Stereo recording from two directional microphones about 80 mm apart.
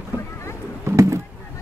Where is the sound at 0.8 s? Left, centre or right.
Right.